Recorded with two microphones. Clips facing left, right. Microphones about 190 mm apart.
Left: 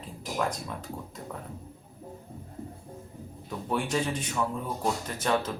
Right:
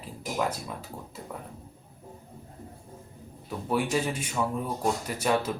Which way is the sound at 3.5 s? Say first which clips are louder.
Right 2 dB; 5° right (ahead or behind).